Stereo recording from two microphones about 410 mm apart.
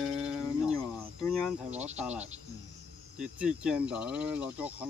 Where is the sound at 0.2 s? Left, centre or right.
Centre.